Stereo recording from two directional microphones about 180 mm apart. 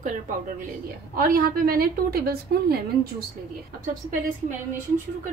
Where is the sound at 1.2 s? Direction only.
55° right (ahead or behind).